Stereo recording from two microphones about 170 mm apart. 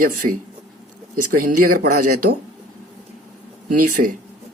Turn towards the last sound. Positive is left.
turn(degrees=-55)  # may be behind; listen again after turning